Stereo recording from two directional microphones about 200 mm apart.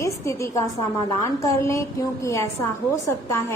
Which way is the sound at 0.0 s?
15° left (ahead or behind).